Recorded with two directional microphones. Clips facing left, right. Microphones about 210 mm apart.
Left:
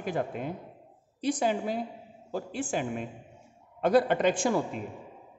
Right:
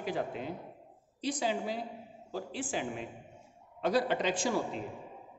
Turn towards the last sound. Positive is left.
turn(degrees=50)  # may be behind; listen again after turning